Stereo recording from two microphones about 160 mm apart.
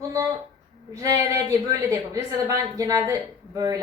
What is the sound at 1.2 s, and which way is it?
Speech, 20° right (ahead or behind).